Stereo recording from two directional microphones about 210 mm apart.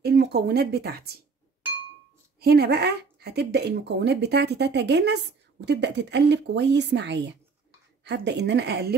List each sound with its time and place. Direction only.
0.0 s speech: 50° right (ahead or behind)
2.4 s speech: 50° right (ahead or behind)